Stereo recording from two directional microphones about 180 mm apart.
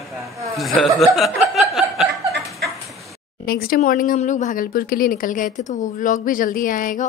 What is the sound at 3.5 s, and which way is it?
Speech, 55° left (ahead or behind).